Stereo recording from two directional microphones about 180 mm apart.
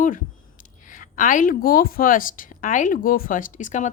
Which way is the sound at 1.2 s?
45° left (ahead or behind).